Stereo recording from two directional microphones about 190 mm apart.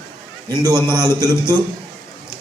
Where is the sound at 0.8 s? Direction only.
20° right (ahead or behind).